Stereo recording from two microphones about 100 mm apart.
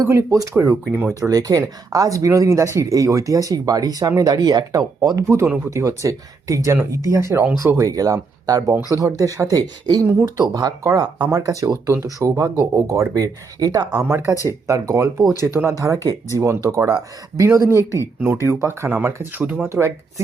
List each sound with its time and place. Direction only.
0.0 s speech: 30° right (ahead or behind)
5.0 s speech: 30° right (ahead or behind)
13.9 s speech: 25° right (ahead or behind)